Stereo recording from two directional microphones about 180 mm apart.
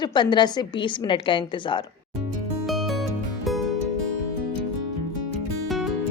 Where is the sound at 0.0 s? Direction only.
25° left (ahead or behind).